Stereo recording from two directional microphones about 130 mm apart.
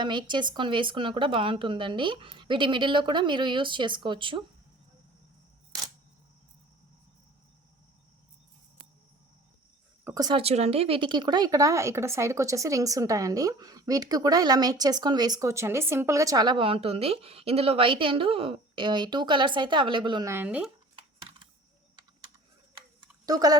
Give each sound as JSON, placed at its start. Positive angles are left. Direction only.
{"t": 0.0, "sound": "speech", "side_deg": -35}
{"t": 10.2, "sound": "speech", "side_deg": -35}
{"t": 10.4, "sound": "speech", "side_deg": -55}
{"t": 20.2, "sound": "speech", "side_deg": -15}
{"t": 23.2, "sound": "speech", "side_deg": -30}